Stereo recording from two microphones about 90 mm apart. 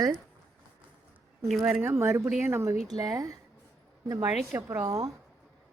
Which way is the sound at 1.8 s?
30° right (ahead or behind).